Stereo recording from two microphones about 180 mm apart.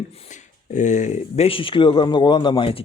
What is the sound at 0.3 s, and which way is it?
Speech, 40° left (ahead or behind).